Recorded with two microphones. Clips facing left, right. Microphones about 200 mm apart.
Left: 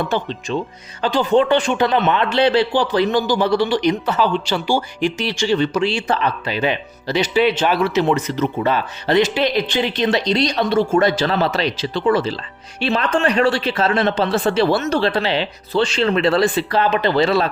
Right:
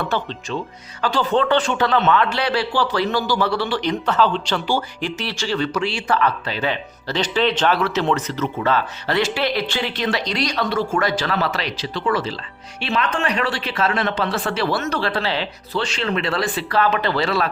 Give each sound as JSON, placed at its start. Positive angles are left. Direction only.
{"t": 0.0, "sound": "a man's voice", "side_deg": 15}